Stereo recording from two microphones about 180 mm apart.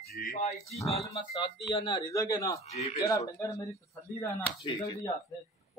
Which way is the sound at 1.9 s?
20° left (ahead or behind).